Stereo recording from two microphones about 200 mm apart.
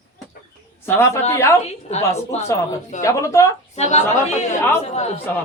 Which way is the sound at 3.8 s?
35° left (ahead or behind).